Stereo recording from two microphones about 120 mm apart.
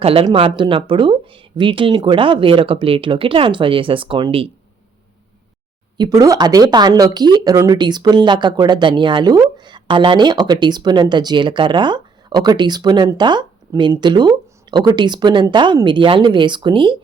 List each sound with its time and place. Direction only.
0.0 s speech: 50° right (ahead or behind)
6.0 s speech: 30° right (ahead or behind)